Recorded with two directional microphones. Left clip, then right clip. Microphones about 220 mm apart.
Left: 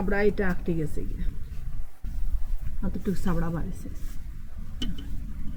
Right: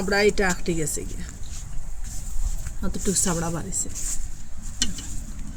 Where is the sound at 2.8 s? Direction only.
20° right (ahead or behind).